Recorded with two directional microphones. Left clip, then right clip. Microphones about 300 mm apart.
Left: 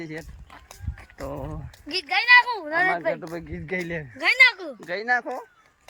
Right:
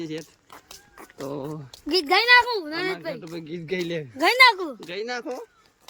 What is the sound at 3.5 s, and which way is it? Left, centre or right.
Speech, centre.